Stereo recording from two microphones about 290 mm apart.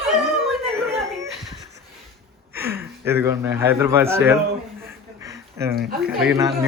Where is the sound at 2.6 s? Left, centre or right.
Centre.